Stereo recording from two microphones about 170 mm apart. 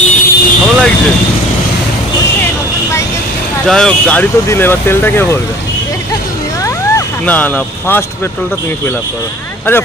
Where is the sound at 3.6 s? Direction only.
5° left (ahead or behind).